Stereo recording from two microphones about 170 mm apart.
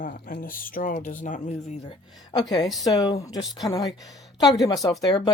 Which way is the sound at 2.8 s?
20° left (ahead or behind).